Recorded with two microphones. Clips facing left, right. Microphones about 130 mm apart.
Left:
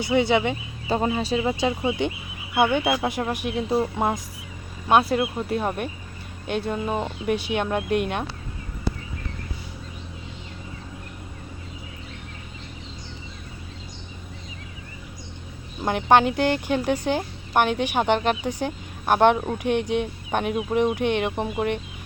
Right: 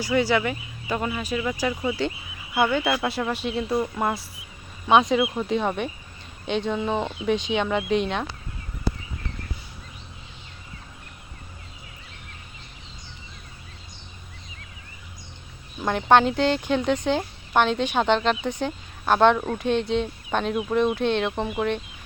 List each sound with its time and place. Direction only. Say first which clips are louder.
0.0 s speech: left 2 dB; 20° left (ahead or behind)
4.9 s speech: right 1 dB; 5° left (ahead or behind)
15.8 s speech: even; 10° left (ahead or behind)